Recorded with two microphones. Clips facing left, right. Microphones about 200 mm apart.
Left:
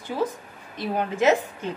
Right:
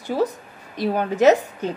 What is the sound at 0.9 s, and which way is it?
Speech, 40° right (ahead or behind).